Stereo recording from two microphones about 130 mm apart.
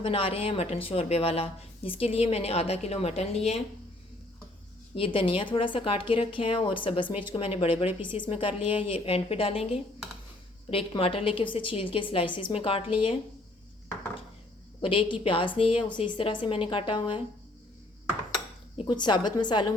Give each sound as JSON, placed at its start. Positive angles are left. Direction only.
{"t": 0.0, "sound": "a woman's voice", "side_deg": 45}
{"t": 4.9, "sound": "a woman's voice", "side_deg": 45}
{"t": 14.8, "sound": "a woman's voice", "side_deg": 40}
{"t": 18.9, "sound": "a woman's voice", "side_deg": 35}